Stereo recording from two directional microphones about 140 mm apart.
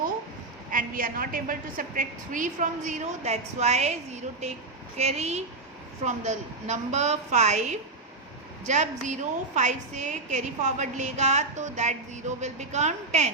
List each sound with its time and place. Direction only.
0.7 s a woman's voice: 80° right; by 13.3 s 55° right (ahead or behind)